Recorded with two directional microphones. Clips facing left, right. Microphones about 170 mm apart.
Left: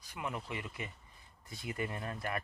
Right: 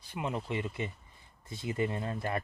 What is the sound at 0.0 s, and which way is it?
Speech, 25° right (ahead or behind).